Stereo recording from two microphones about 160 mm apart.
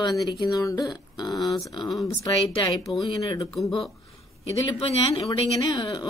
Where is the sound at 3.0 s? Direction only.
30° left (ahead or behind).